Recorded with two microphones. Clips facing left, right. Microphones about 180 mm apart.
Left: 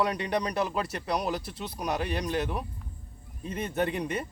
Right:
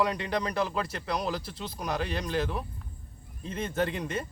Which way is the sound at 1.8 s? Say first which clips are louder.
Left 2 dB; 15° left (ahead or behind).